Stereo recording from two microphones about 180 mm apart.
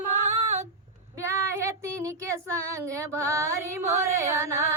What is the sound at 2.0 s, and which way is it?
Child singing, 15° right (ahead or behind).